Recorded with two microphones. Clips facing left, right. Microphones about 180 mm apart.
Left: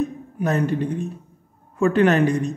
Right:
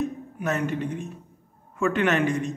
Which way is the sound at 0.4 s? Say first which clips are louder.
Left 5 dB; 35° left (ahead or behind).